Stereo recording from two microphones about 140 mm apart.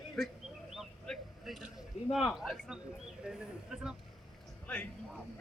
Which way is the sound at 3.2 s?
5° right (ahead or behind).